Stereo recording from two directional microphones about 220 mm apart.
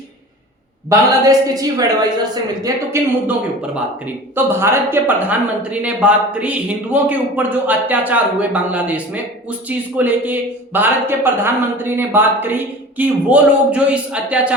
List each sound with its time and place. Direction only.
0.9 s a man's voice: 15° right (ahead or behind)